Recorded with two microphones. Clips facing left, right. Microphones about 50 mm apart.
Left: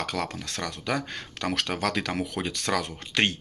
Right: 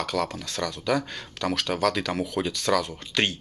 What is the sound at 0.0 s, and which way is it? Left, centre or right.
Speech, left.